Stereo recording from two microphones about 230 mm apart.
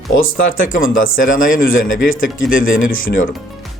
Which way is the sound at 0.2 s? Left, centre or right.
Left.